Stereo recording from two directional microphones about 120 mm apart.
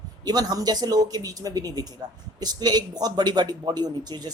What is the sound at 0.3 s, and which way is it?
Speech, 35° right (ahead or behind).